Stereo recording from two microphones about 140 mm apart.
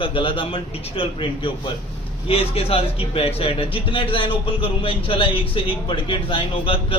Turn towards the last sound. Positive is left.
turn(degrees=40)  # may be behind; listen again after turning